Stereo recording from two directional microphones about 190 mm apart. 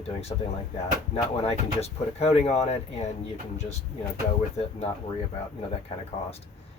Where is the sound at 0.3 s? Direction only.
15° left (ahead or behind).